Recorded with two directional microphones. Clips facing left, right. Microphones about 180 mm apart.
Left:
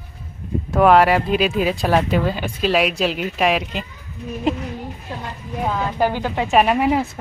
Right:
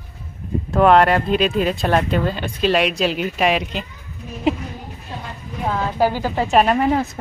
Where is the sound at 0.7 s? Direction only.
5° left (ahead or behind).